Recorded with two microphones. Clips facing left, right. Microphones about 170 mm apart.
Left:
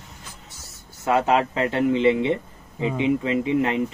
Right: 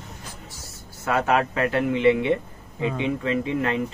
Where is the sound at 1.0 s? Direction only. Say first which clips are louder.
Left 2 dB; 25° left (ahead or behind).